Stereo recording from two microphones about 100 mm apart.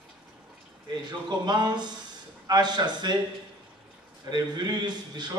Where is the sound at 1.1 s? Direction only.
45° right (ahead or behind).